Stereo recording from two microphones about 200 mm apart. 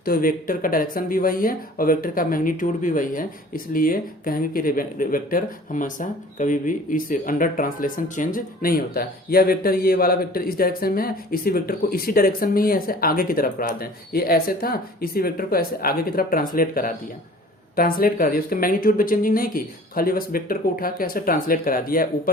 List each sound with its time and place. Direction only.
0.0 s speech: 45° left (ahead or behind)